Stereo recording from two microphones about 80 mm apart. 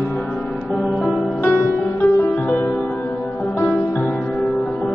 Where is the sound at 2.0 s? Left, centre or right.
Left.